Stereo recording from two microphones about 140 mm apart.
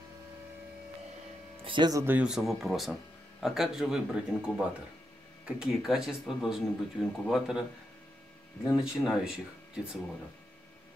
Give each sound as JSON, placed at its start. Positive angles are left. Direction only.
{"t": 1.6, "sound": "a sound", "side_deg": -35}
{"t": 2.0, "sound": "speech", "side_deg": -5}
{"t": 8.7, "sound": "speech", "side_deg": -5}